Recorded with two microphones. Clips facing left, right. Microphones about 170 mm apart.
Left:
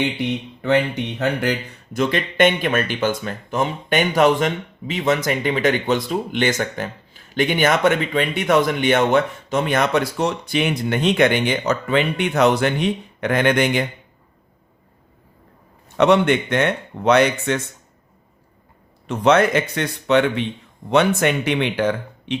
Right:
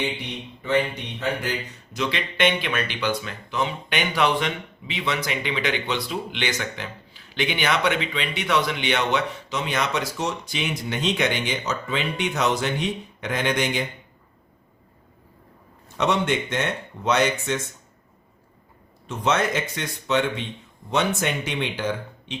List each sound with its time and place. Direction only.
0.6 s speech: 70° left (ahead or behind)
16.0 s speech: 60° left (ahead or behind)
19.0 s speech: 60° left (ahead or behind)